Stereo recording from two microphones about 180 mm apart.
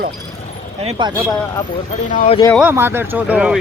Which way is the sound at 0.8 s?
30° right (ahead or behind).